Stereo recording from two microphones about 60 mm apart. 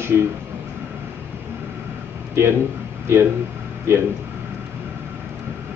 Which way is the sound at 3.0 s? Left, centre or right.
Right.